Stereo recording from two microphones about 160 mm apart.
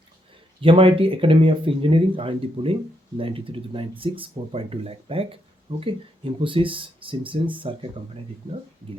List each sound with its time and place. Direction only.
0.6 s speech: 35° right (ahead or behind)